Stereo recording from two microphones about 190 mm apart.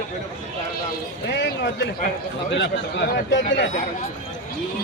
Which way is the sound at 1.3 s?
70° left (ahead or behind).